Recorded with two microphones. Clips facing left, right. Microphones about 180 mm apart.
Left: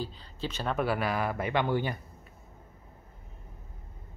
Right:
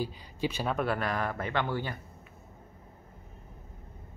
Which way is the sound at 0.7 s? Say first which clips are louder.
Left 1 dB; 5° left (ahead or behind).